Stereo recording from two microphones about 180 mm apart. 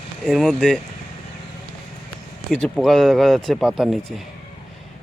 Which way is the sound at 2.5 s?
5° left (ahead or behind).